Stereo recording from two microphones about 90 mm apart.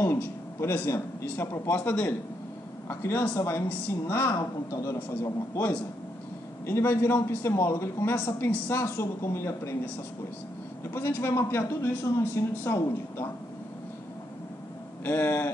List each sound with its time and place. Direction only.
0.0 s a man's voice: 30° left (ahead or behind)
2.9 s a man's voice: 25° left (ahead or behind)
6.6 s a man's voice: 30° left (ahead or behind)
10.8 s a man's voice: 30° left (ahead or behind)
15.0 s a man's voice: 25° left (ahead or behind)